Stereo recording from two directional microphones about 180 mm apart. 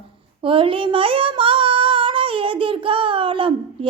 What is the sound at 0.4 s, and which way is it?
Female singing, 30° right (ahead or behind).